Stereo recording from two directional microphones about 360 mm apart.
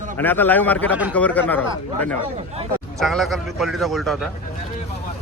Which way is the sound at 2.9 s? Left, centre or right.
Centre.